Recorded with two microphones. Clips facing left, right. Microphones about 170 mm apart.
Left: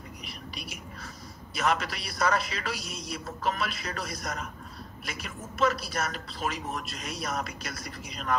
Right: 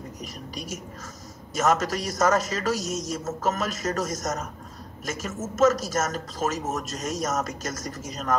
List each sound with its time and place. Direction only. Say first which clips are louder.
0.2 s a woman's voice: right 5 dB; 45° right (ahead or behind)